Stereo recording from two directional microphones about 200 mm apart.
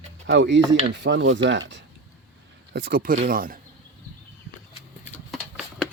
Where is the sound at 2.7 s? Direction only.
50° right (ahead or behind).